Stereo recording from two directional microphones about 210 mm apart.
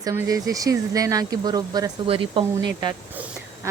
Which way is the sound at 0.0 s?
15° right (ahead or behind).